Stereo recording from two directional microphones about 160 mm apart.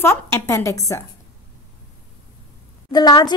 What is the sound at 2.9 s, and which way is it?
Speech, 25° left (ahead or behind).